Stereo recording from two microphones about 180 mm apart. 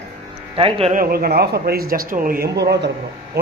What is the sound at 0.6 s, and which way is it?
Speech, 30° right (ahead or behind).